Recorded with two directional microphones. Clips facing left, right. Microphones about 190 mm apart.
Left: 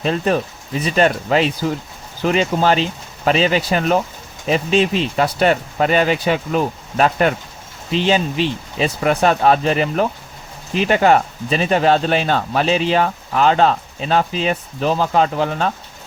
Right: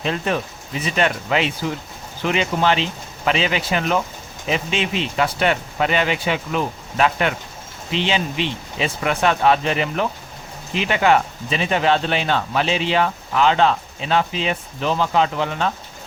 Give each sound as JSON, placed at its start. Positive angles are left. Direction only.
{"t": 0.0, "sound": "speech", "side_deg": 40}